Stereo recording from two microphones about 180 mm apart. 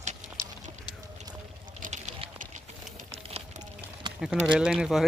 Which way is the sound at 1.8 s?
40° right (ahead or behind).